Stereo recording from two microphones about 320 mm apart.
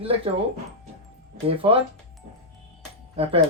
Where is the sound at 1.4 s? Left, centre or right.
Centre.